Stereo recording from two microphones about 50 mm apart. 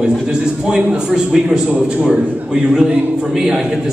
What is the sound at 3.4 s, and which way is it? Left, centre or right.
Speech, centre.